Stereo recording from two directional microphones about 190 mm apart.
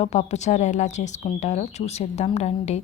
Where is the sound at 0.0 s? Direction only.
35° left (ahead or behind).